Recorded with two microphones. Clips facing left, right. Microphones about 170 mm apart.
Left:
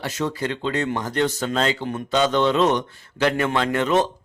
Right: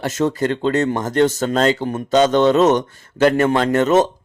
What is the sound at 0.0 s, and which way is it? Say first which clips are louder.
Speech: right 7 dB; 45° right (ahead or behind).